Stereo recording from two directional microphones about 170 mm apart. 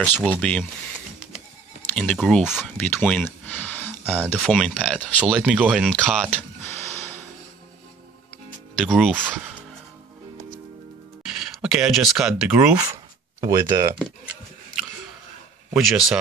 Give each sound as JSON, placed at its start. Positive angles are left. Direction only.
{"t": 0.0, "sound": "speech", "side_deg": 10}
{"t": 1.8, "sound": "speech", "side_deg": 5}
{"t": 4.4, "sound": "speech", "side_deg": 0}
{"t": 6.3, "sound": "a sound", "side_deg": 10}
{"t": 8.7, "sound": "speech", "side_deg": 0}
{"t": 9.1, "sound": "speech", "side_deg": -10}
{"t": 11.6, "sound": "speech", "side_deg": -5}
{"t": 12.7, "sound": "speech", "side_deg": -20}
{"t": 15.7, "sound": "speech", "side_deg": 0}